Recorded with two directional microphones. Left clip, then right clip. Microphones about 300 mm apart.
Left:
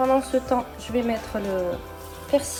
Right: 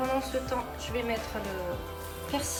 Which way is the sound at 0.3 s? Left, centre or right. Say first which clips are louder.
Left 8 dB; centre.